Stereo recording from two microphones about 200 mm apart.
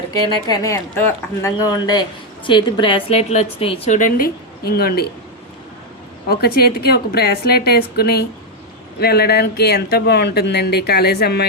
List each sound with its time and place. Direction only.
0.1 s a woman's voice: 20° left (ahead or behind); by 5.0 s 50° left (ahead or behind)
6.2 s speech: 50° left (ahead or behind)